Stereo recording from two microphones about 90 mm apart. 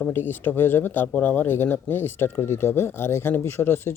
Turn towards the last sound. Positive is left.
turn(degrees=25)  # may be behind; listen again after turning